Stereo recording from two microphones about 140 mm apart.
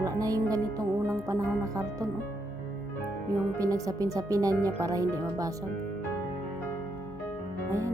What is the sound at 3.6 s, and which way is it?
Speech, 25° right (ahead or behind).